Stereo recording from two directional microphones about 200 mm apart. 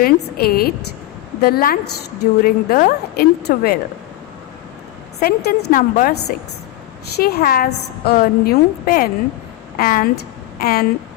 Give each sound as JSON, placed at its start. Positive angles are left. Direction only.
{"t": 0.0, "sound": "a woman's voice", "side_deg": 50}
{"t": 5.2, "sound": "a woman's voice", "side_deg": 50}